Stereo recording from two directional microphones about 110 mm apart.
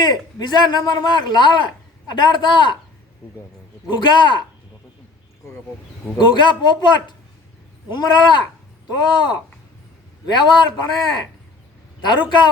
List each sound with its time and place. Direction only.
0.0 s a man's voice: 40° left (ahead or behind)
3.8 s a man's voice: 40° left (ahead or behind)
6.1 s a man's voice: 45° left (ahead or behind)